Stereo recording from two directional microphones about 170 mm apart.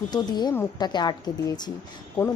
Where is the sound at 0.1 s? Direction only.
25° left (ahead or behind).